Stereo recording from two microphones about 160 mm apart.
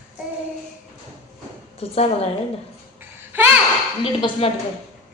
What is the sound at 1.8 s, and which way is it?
Speech, 40° left (ahead or behind).